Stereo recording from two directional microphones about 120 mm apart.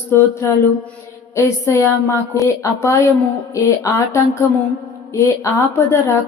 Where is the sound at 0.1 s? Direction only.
25° left (ahead or behind).